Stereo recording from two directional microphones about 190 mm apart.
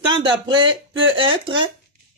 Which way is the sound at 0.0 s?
25° right (ahead or behind).